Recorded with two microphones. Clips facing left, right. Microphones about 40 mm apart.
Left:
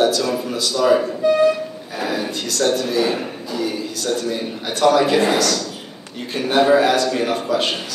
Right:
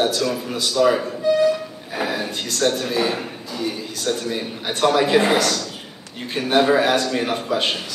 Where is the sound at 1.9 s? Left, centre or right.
Right.